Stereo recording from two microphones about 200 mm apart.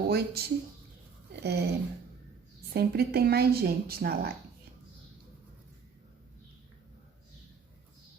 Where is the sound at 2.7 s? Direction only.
50° right (ahead or behind).